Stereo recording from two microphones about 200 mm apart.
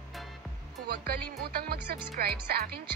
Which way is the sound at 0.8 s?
50° right (ahead or behind).